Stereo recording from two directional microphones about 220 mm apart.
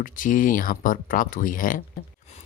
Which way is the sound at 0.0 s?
35° left (ahead or behind).